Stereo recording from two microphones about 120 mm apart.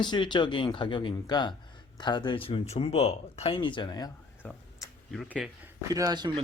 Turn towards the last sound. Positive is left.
turn(degrees=-35)  # may be behind; listen again after turning